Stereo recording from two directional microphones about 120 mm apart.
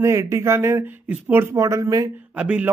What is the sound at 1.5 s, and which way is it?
Speech, 25° right (ahead or behind).